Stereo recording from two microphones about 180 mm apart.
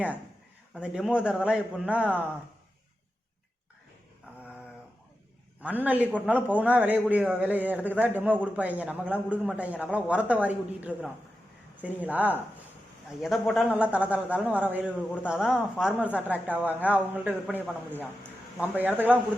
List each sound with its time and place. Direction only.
0.7 s a man's voice: 5° right (ahead or behind)
5.8 s a man's voice: 10° right (ahead or behind)